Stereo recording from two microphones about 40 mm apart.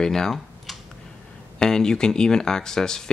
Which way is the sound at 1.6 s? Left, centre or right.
Centre.